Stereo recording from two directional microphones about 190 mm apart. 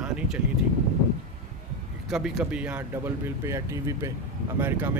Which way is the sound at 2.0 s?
Centre (ahead or behind).